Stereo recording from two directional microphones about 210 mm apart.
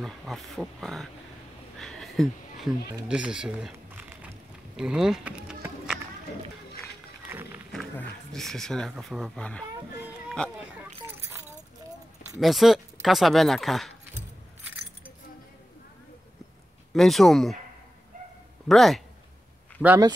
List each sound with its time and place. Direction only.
0.0 s speech: centre (ahead or behind)
1.8 s a sound: centre (ahead or behind)
3.1 s speech: 5° right (ahead or behind)
7.2 s a sound: 10° right (ahead or behind)
7.9 s speech: 5° left (ahead or behind)
11.1 s keys jangling: 10° right (ahead or behind)
12.4 s speech: centre (ahead or behind)
16.9 s speech: centre (ahead or behind)
18.7 s speech: centre (ahead or behind)